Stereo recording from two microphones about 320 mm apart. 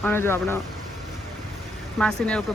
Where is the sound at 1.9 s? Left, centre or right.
Centre.